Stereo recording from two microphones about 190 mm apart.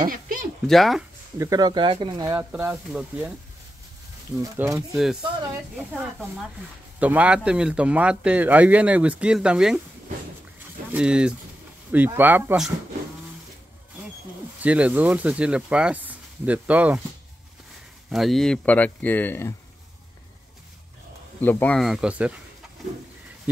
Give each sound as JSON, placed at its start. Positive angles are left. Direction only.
{"t": 0.0, "sound": "a sound", "side_deg": -45}
{"t": 0.7, "sound": "speech", "side_deg": 0}
{"t": 1.4, "sound": "speech", "side_deg": -20}
{"t": 2.3, "sound": "a man's voice", "side_deg": -10}
{"t": 4.4, "sound": "a man's voice", "side_deg": -15}
{"t": 4.9, "sound": "speech", "side_deg": 0}
{"t": 7.0, "sound": "a man's voice", "side_deg": -5}
{"t": 10.9, "sound": "a man's voice", "side_deg": -5}
{"t": 14.6, "sound": "a man's voice", "side_deg": -5}
{"t": 18.1, "sound": "speech", "side_deg": 0}
{"t": 21.4, "sound": "speech", "side_deg": 10}